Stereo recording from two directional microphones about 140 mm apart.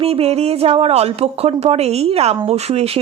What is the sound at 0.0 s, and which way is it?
A woman's voice, 45° right (ahead or behind).